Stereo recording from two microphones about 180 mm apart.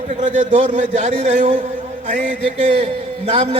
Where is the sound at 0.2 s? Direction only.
40° right (ahead or behind).